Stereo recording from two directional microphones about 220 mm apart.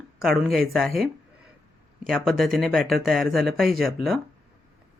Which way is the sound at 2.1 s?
Centre (ahead or behind).